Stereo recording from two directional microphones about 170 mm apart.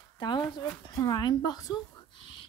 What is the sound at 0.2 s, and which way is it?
A woman's voice, 25° left (ahead or behind).